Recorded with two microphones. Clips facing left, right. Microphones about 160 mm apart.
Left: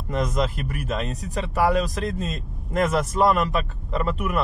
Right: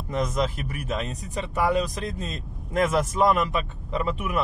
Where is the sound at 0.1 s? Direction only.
Centre (ahead or behind).